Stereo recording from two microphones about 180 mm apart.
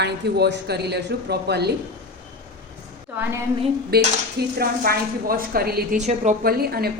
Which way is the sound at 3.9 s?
60° right (ahead or behind).